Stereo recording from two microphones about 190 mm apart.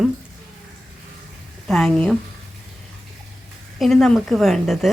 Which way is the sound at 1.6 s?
5° left (ahead or behind).